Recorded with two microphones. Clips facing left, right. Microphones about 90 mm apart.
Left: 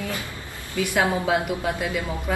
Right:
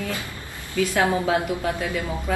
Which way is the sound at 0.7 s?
15° left (ahead or behind).